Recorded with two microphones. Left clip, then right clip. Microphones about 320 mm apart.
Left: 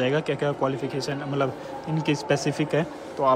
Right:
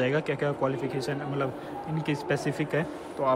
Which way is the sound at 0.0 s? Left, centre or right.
Centre.